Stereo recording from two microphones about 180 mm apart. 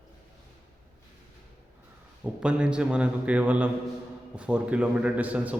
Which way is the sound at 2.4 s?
5° right (ahead or behind).